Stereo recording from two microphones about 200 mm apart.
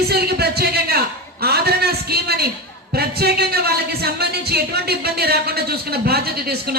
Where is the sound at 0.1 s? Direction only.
50° right (ahead or behind).